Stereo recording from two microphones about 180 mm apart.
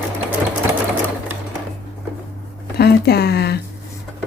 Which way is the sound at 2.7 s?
60° left (ahead or behind).